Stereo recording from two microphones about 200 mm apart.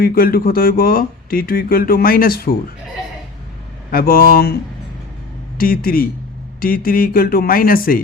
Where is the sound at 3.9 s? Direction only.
45° left (ahead or behind).